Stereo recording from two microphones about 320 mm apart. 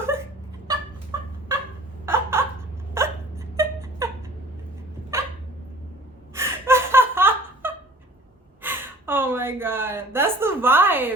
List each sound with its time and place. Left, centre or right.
1.1 s chicken: centre
2.0 s a sound: centre
5.1 s dog: centre
6.3 s gasp: centre